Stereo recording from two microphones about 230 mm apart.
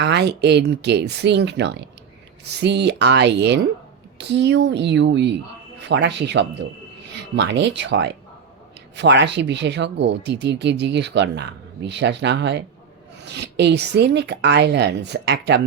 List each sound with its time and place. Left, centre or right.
0.0 s speech: right